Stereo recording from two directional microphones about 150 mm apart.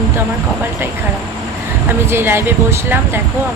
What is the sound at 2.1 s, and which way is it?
Speech, 15° right (ahead or behind).